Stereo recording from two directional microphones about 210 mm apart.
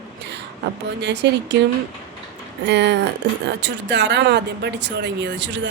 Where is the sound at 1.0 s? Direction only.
55° right (ahead or behind).